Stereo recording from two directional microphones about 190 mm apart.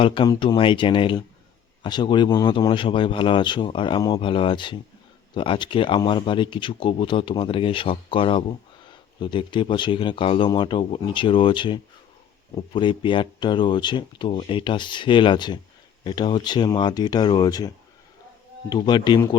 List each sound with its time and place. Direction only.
0.0 s speech: 25° left (ahead or behind)
18.7 s speech: 25° left (ahead or behind)